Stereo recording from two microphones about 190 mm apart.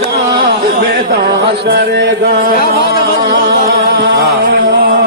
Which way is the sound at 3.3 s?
50° right (ahead or behind).